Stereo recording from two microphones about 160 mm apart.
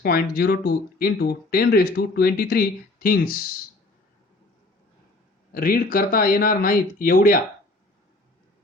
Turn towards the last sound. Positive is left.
turn(degrees=60)  # may be behind; listen again after turning